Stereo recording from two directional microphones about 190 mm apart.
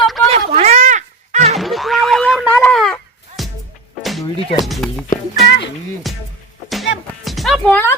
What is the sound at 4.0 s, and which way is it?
Music, centre (ahead or behind).